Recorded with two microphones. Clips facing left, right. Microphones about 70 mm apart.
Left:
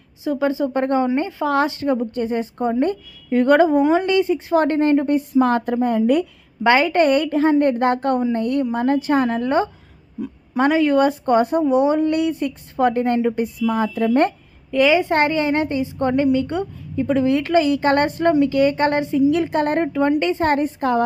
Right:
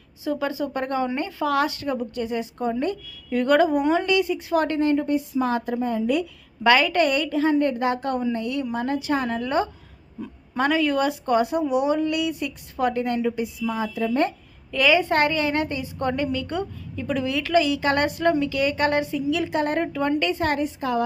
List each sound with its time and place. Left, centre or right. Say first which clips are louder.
0.3 s a woman's voice: left 6 dB; left
6.6 s a woman's voice: left 3 dB; left
14.7 s a woman's voice: left 4 dB; left
19.9 s a woman's voice: left 5 dB; left